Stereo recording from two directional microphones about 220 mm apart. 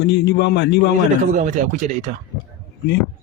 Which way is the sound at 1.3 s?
35° right (ahead or behind).